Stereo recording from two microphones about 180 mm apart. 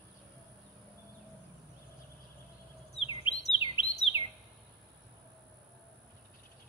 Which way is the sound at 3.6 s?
30° left (ahead or behind).